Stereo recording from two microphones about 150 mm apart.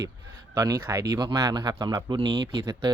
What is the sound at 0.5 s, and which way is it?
Speech, 20° right (ahead or behind).